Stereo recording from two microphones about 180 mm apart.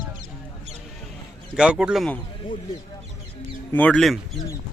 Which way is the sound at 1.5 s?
5° right (ahead or behind).